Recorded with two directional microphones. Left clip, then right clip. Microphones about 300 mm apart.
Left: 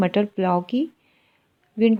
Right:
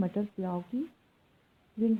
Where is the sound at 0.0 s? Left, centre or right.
Left.